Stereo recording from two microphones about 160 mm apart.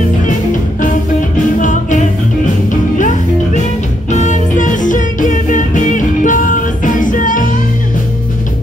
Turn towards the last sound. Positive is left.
turn(degrees=55)  # may be behind; listen again after turning